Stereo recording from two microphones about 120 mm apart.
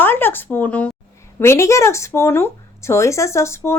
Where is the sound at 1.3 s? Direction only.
25° left (ahead or behind).